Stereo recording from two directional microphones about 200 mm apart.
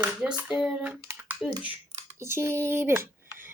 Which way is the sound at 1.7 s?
30° right (ahead or behind).